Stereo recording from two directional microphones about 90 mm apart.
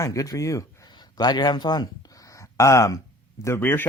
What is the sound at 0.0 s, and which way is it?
Speech, 35° left (ahead or behind).